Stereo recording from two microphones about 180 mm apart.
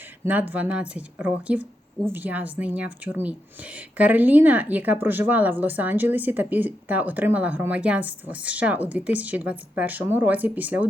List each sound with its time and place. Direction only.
0.3 s speech: 10° right (ahead or behind)